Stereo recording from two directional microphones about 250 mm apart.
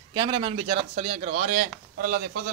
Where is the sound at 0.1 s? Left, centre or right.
Centre.